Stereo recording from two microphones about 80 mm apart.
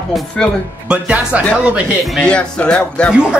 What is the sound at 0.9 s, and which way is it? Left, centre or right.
Speech, centre.